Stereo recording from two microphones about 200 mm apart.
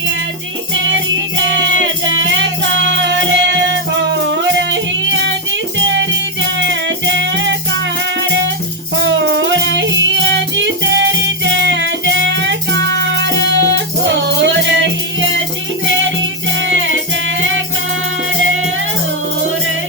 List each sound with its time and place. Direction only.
0.7 s music: 65° right (ahead or behind)
9.0 s music: 65° right (ahead or behind)
16.6 s music: 70° right (ahead or behind)